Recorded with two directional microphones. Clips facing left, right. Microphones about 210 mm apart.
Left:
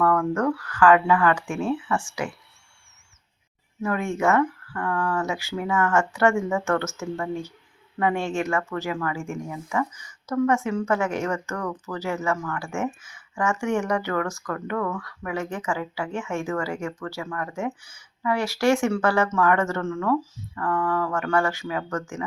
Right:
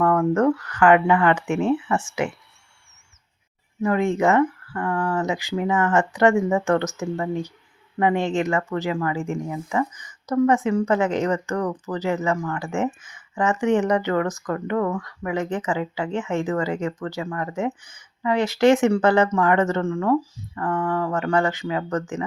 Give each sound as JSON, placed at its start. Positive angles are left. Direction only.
{"t": 0.0, "sound": "speech", "side_deg": -25}
{"t": 3.8, "sound": "speech", "side_deg": -15}